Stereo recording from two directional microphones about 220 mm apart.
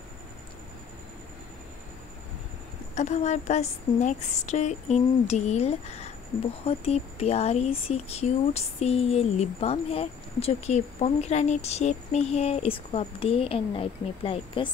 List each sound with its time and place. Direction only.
2.9 s a woman's voice: 30° left (ahead or behind)